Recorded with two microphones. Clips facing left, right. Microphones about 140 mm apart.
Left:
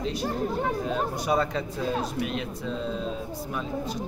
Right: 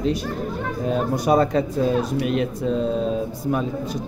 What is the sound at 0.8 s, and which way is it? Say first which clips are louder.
A man's voice: right 7 dB; 45° right (ahead or behind).